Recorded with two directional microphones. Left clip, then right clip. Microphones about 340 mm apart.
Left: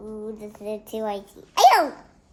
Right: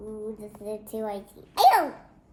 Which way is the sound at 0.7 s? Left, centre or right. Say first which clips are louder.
Left 4 dB; centre.